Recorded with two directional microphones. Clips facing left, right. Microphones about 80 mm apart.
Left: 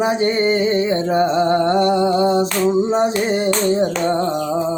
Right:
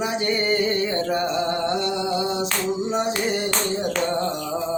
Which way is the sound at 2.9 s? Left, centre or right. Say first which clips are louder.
Left 6 dB; left.